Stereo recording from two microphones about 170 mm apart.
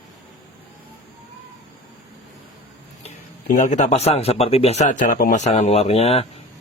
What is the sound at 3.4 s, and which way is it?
Speech, 50° left (ahead or behind).